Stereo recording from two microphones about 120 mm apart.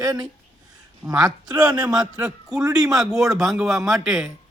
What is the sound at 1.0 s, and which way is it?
A man's voice, 10° right (ahead or behind).